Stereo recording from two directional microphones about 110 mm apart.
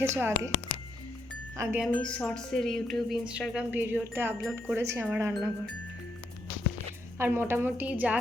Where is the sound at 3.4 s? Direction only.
10° right (ahead or behind).